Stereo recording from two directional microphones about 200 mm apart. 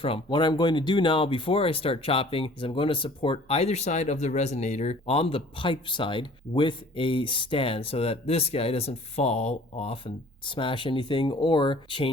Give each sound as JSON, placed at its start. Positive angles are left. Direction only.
{"t": 0.0, "sound": "speech", "side_deg": 25}